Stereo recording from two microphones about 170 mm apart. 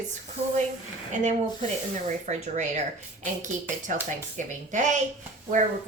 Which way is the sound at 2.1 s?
45° right (ahead or behind).